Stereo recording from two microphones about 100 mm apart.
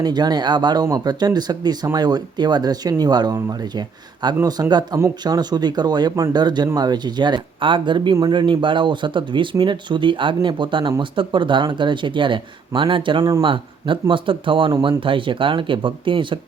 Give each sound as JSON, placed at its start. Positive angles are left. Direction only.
{"t": 0.0, "sound": "speech", "side_deg": -45}